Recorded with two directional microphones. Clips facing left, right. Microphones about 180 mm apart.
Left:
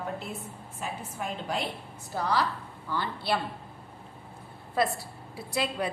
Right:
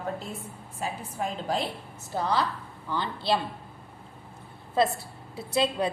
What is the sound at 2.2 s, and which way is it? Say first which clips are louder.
A woman's voice: right 1 dB; 25° right (ahead or behind).